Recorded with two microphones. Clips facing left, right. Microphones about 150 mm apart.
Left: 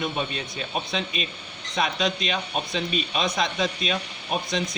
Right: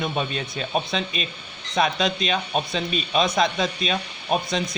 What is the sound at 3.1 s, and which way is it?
Speech, 40° right (ahead or behind).